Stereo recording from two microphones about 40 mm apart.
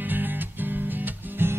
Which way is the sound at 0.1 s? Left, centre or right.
Right.